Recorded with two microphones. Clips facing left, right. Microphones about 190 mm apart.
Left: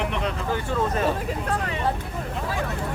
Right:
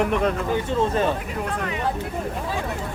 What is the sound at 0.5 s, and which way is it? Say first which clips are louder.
Speech: right 3 dB; 25° right (ahead or behind).